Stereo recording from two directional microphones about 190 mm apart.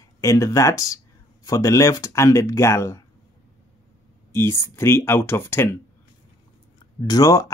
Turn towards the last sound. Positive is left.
turn(degrees=20)  # may be behind; listen again after turning